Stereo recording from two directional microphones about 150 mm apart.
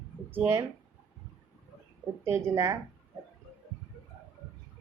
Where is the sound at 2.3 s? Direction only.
20° right (ahead or behind).